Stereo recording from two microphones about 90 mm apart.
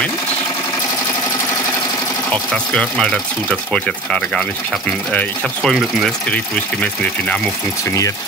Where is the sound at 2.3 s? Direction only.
10° left (ahead or behind).